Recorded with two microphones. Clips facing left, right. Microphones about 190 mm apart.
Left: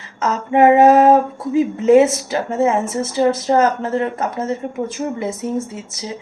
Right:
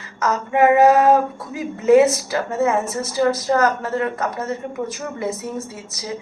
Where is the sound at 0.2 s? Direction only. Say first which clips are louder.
Left 3 dB; 25° left (ahead or behind).